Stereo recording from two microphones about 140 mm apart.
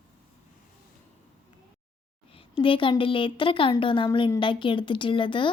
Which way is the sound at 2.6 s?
40° left (ahead or behind).